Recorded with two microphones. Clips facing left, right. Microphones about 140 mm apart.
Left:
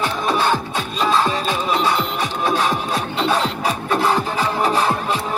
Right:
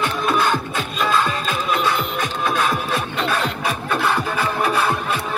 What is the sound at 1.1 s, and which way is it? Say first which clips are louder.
Music: left 2 dB; 35° left (ahead or behind).